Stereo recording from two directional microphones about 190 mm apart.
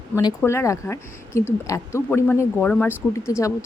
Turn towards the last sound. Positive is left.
turn(degrees=15)  # may be behind; listen again after turning